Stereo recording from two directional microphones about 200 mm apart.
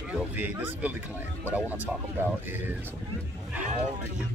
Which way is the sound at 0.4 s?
10° right (ahead or behind).